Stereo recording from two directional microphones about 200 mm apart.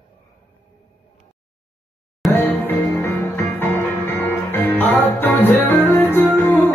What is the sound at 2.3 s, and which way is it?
Music, 10° left (ahead or behind).